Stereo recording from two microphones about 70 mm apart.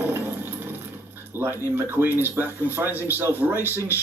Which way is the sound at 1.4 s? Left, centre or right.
Right.